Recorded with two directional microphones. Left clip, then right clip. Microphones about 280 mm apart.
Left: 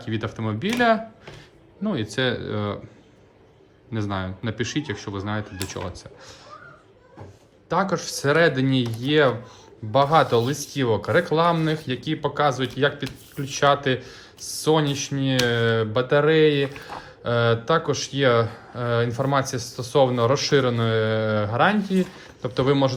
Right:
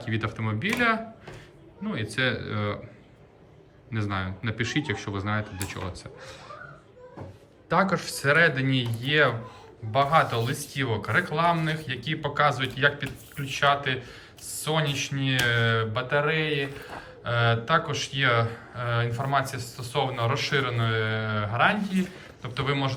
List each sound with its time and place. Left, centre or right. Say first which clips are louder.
0.0 s speech: left 2 dB; centre
3.9 s speech: left 2 dB; centre
7.7 s speech: left 1 dB; centre